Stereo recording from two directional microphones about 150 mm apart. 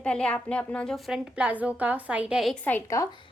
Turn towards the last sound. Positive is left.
turn(degrees=15)  # may be behind; listen again after turning